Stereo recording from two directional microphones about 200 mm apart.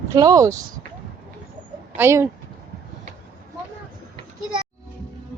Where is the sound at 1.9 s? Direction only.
10° right (ahead or behind).